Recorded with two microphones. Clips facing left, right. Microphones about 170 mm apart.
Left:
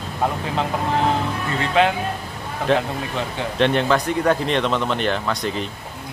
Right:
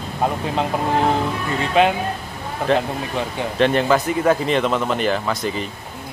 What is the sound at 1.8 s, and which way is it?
Speech, 15° right (ahead or behind).